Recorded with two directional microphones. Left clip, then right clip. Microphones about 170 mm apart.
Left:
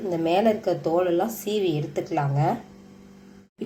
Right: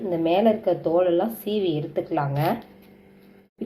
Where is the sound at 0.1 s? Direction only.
Centre (ahead or behind).